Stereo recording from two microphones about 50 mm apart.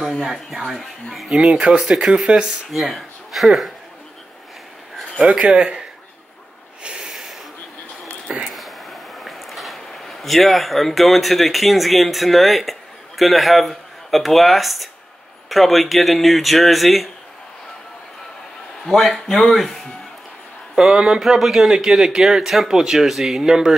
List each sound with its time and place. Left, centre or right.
0.0 s speech: centre
2.7 s speech: centre
5.2 s speech: centre
6.8 s snort: centre
7.1 s snort: centre
8.5 s a sound: centre
13.2 s speech: centre
18.9 s speech: centre
20.7 s speech: centre